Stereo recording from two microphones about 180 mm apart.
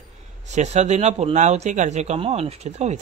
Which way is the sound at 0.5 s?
40° right (ahead or behind).